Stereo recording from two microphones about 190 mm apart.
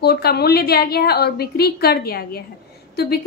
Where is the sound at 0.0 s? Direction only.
55° left (ahead or behind).